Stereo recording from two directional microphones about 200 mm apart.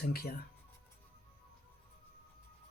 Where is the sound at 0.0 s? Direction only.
50° left (ahead or behind).